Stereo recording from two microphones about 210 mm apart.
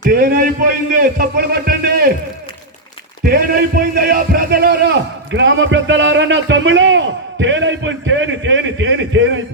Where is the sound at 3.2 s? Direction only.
45° right (ahead or behind).